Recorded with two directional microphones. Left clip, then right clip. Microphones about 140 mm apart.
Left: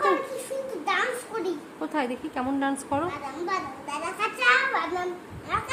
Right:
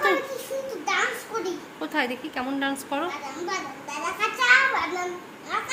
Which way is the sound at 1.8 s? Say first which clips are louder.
Right 3 dB; 20° left (ahead or behind).